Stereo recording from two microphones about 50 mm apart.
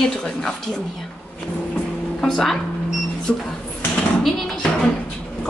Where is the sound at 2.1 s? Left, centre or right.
Centre.